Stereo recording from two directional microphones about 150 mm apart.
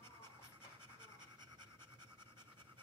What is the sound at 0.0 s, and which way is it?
Scratch, 30° right (ahead or behind).